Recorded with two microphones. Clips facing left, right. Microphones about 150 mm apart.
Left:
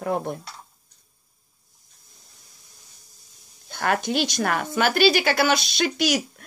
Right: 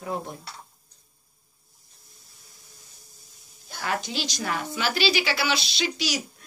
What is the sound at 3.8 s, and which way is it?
A woman's voice, 55° left (ahead or behind).